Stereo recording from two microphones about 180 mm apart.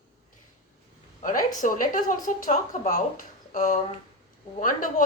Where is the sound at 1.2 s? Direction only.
50° left (ahead or behind).